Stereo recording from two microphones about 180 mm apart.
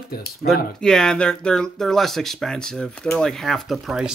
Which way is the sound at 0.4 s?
50° left (ahead or behind).